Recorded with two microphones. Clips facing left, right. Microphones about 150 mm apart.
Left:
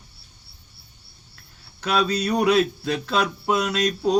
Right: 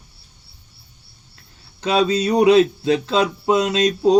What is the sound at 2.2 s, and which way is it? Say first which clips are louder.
Mantra: right 8 dB; 20° right (ahead or behind).